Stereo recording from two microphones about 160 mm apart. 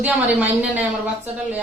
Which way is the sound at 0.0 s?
10° right (ahead or behind).